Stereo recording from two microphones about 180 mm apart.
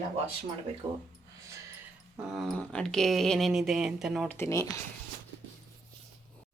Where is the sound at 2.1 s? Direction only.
Centre (ahead or behind).